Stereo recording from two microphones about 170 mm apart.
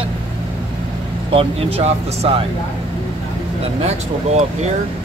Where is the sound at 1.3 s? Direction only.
35° right (ahead or behind).